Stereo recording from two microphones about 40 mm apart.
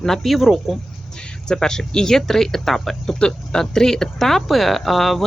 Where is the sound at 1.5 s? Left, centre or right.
Centre.